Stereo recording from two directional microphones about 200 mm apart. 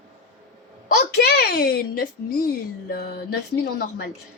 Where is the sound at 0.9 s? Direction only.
55° left (ahead or behind).